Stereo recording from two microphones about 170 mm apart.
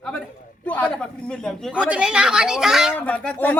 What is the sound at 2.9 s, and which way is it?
Speech, 10° left (ahead or behind).